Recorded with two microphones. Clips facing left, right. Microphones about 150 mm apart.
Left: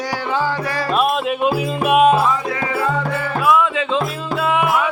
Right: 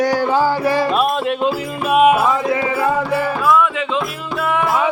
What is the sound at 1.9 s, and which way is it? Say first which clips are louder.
Music: right 1 dB; 5° right (ahead or behind).